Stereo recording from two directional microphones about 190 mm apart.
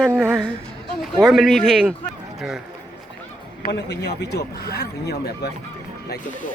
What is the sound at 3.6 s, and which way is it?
Speech, 60° left (ahead or behind).